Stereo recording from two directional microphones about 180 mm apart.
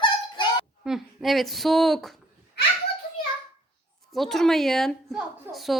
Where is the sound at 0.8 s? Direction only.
Centre (ahead or behind).